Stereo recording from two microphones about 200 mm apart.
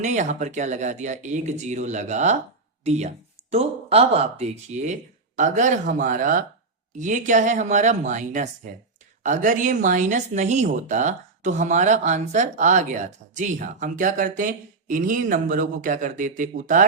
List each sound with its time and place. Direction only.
0.0 s speech: 35° right (ahead or behind)